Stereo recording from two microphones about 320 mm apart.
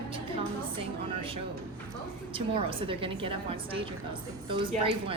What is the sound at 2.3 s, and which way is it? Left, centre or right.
A woman's voice, centre.